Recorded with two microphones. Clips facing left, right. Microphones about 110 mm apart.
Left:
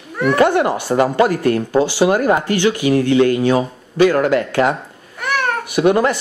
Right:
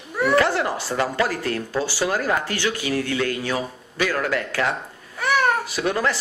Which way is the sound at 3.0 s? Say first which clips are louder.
Left 11 dB; 20° left (ahead or behind).